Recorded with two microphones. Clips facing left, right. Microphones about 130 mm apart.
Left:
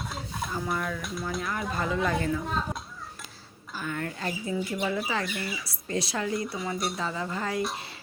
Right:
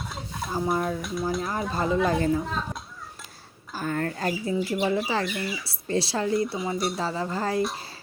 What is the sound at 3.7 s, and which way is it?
Speech, 40° right (ahead or behind).